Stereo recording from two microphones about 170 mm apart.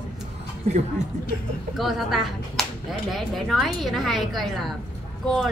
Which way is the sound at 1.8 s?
Centre (ahead or behind).